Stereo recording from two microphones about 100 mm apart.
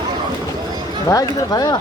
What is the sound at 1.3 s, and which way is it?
Speech, 40° left (ahead or behind).